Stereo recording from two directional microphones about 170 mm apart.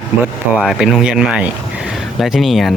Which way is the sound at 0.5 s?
5° right (ahead or behind).